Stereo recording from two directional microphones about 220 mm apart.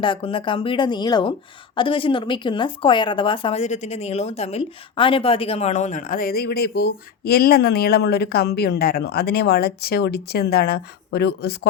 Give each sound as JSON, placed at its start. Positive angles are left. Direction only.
{"t": 0.0, "sound": "a woman's voice", "side_deg": 25}